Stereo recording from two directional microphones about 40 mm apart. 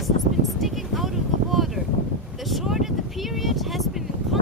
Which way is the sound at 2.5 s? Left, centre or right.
Centre.